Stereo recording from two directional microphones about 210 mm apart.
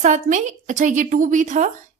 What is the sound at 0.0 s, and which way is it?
A woman's voice, 35° right (ahead or behind).